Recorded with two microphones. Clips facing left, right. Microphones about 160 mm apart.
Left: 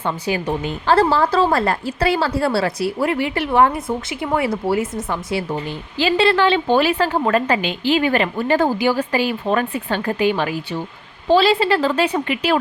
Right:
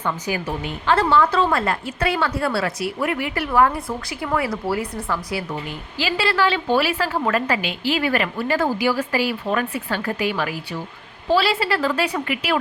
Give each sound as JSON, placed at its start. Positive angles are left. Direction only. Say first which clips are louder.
{"t": 0.0, "sound": "a woman's voice", "louder": "left 3 dB", "side_deg": 25}
{"t": 0.9, "sound": "a woman's voice", "louder": "left 2 dB", "side_deg": 35}